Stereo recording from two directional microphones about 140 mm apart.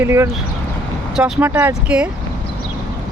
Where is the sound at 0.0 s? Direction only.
20° right (ahead or behind).